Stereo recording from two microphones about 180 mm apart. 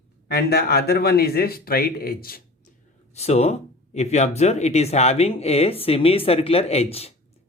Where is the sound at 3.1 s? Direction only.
35° left (ahead or behind).